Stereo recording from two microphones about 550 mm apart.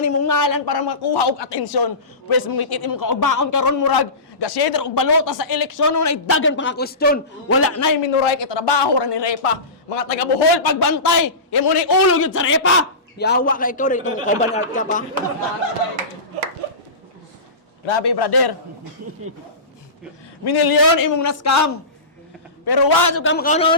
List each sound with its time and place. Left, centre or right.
0.0 s a man's voice: left
8.0 s a man's voice: left
10.4 s a man's voice: left
11.9 s a man's voice: left
17.8 s a man's voice: left
20.4 s a man's voice: left; by 23.7 s centre